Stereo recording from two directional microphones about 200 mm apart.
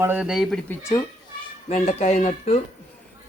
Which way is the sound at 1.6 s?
35° left (ahead or behind).